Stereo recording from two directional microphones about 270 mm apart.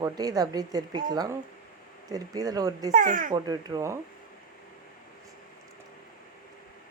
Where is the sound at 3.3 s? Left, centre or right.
Centre.